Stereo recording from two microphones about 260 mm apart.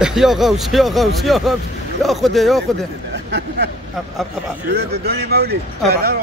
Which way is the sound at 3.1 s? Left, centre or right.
Right.